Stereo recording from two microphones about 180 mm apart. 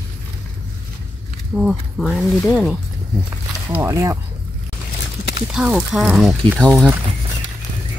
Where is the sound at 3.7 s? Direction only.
15° right (ahead or behind).